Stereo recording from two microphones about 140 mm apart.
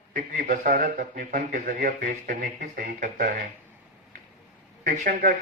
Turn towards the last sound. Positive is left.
turn(degrees=-70)  # may be behind; listen again after turning